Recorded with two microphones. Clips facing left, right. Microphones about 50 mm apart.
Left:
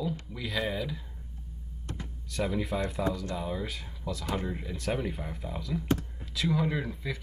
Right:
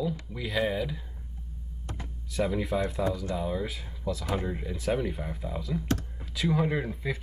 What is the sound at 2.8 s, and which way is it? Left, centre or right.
Speech, centre.